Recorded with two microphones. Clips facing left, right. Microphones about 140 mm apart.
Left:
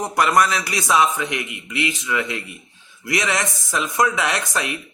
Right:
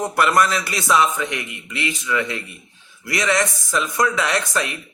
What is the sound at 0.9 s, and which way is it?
Speech, 20° left (ahead or behind).